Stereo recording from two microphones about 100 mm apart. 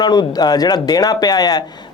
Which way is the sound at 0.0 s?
45° left (ahead or behind).